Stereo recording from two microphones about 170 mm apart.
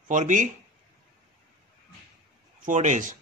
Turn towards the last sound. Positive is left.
turn(degrees=-45)  # may be behind; listen again after turning